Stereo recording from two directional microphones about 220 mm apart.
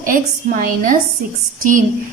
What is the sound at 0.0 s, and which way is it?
Speech, 40° right (ahead or behind).